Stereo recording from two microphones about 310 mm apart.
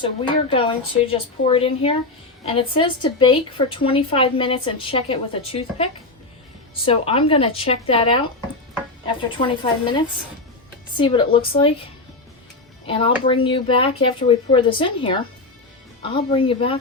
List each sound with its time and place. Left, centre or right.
0.5 s a woman's voice: centre
9.4 s a woman's voice: centre
12.9 s a woman's voice: centre